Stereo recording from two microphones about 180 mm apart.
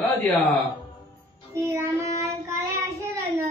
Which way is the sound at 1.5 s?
15° right (ahead or behind).